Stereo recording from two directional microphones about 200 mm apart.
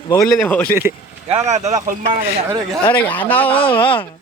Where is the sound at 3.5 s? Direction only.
25° left (ahead or behind).